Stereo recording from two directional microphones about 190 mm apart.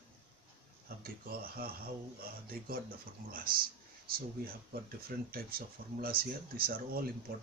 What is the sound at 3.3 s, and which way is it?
Speech, 50° right (ahead or behind).